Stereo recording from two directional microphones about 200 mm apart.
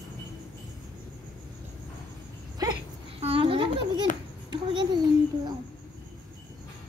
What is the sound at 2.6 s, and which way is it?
Baby cry, 20° right (ahead or behind).